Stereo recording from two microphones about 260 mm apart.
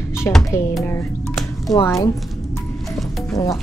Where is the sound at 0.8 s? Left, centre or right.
Centre.